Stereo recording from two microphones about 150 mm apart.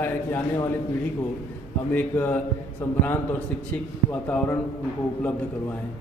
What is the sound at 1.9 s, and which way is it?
Speech, 10° left (ahead or behind).